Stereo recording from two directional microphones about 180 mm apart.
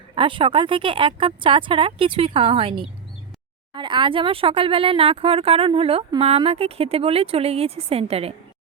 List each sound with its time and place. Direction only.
0.2 s speech: 30° right (ahead or behind)